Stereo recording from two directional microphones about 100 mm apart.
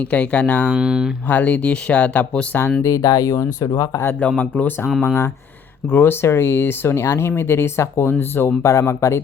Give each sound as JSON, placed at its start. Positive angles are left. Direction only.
{"t": 0.0, "sound": "speech", "side_deg": 15}
{"t": 0.8, "sound": "speech", "side_deg": -5}
{"t": 1.3, "sound": "speech", "side_deg": 15}
{"t": 2.8, "sound": "speech", "side_deg": 35}
{"t": 3.3, "sound": "speech", "side_deg": 30}
{"t": 3.7, "sound": "speech", "side_deg": 40}
{"t": 4.0, "sound": "speech", "side_deg": 15}